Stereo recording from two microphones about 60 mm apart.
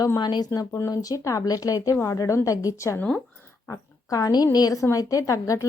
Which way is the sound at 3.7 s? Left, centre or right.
Left.